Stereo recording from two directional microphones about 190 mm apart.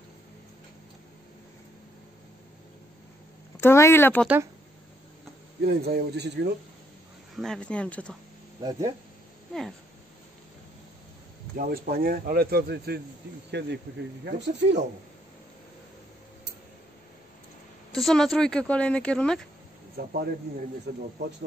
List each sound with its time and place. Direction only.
3.6 s speech: 15° left (ahead or behind)
5.6 s a man's voice: 55° right (ahead or behind)
7.3 s speech: centre (ahead or behind)
8.5 s speech: 20° right (ahead or behind)
9.5 s speech: centre (ahead or behind)
11.5 s a man's voice: 50° right (ahead or behind); by 14.9 s 65° right (ahead or behind)
17.9 s speech: centre (ahead or behind)
20.0 s a man's voice: 55° right (ahead or behind)